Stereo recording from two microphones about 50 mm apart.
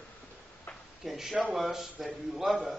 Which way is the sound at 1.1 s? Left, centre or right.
Centre.